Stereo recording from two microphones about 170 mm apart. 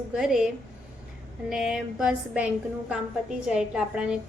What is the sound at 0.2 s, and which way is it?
A woman's voice, 5° right (ahead or behind).